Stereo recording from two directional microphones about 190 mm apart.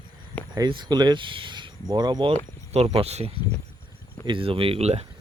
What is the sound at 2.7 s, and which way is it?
Speech, 35° right (ahead or behind).